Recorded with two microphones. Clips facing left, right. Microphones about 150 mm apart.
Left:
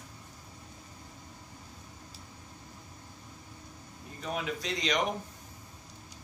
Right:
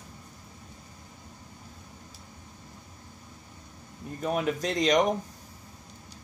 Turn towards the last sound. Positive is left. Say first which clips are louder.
# right 7 dB
turn(degrees=-45)  # may be behind; listen again after turning